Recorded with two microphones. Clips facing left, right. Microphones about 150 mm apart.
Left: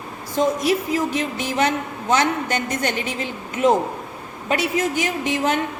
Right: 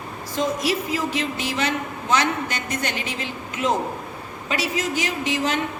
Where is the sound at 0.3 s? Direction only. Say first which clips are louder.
Left 4 dB; 50° left (ahead or behind).